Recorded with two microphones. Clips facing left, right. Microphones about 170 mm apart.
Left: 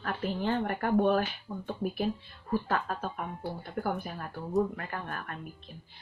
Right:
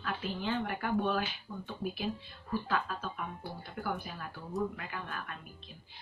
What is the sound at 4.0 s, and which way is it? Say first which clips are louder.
A woman's voice: left 5 dB; 50° left (ahead or behind).